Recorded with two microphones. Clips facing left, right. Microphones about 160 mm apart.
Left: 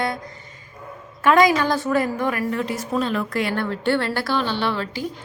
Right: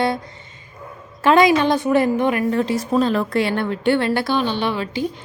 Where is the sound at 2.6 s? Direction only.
30° right (ahead or behind).